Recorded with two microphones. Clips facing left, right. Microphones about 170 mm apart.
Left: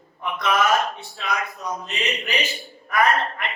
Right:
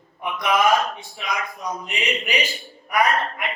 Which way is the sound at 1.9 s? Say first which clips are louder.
Right 2 dB; 15° right (ahead or behind).